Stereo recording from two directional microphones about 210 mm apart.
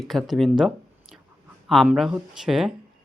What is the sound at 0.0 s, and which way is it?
Speech, centre (ahead or behind).